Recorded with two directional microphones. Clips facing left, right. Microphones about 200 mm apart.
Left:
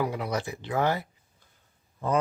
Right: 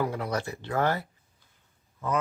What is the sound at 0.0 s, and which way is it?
Speech, 10° left (ahead or behind).